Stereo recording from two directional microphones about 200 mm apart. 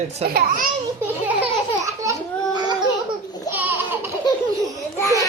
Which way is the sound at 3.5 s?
10° right (ahead or behind).